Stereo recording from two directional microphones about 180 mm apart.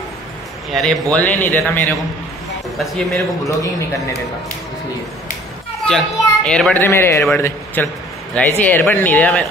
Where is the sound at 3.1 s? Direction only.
15° left (ahead or behind).